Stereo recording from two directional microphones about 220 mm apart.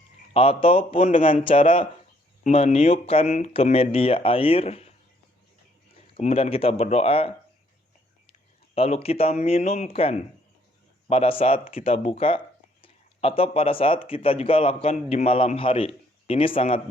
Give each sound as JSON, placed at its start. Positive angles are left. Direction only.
{"t": 0.3, "sound": "speech", "side_deg": 25}
{"t": 1.5, "sound": "speech", "side_deg": 25}
{"t": 6.1, "sound": "speech", "side_deg": 25}